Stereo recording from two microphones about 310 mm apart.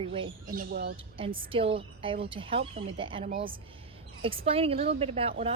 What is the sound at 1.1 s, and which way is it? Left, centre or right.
A woman's voice, centre.